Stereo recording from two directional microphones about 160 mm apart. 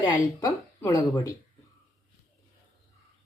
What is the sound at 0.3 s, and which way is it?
Speech, 20° left (ahead or behind).